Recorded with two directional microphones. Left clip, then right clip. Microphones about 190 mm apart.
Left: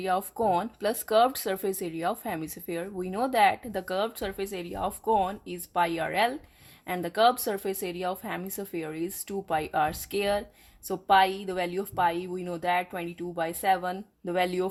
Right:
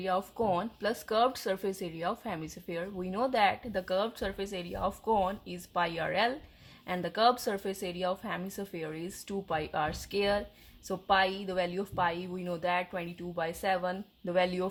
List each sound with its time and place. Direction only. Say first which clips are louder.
0.0 s speech: left 4 dB; 40° left (ahead or behind)